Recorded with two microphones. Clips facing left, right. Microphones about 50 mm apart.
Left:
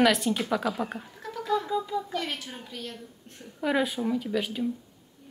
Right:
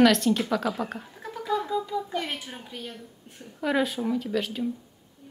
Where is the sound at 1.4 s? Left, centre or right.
Centre.